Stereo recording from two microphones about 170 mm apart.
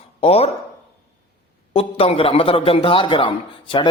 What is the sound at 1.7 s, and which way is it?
A man's voice, 35° left (ahead or behind).